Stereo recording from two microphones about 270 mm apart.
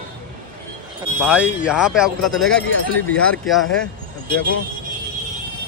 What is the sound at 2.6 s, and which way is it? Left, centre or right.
Speech, left.